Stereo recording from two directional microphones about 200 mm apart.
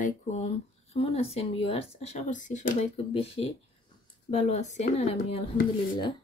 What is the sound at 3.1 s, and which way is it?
Speech, 30° left (ahead or behind).